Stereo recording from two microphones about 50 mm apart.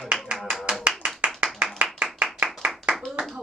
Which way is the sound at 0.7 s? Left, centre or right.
Right.